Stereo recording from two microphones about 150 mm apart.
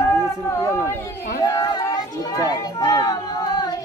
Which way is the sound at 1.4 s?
25° left (ahead or behind).